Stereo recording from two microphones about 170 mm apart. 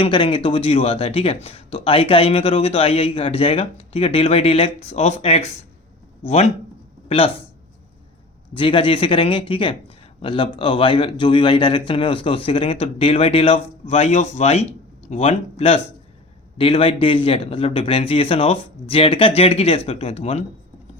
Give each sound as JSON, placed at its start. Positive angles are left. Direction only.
{"t": 0.0, "sound": "speech", "side_deg": 30}
{"t": 8.5, "sound": "speech", "side_deg": 30}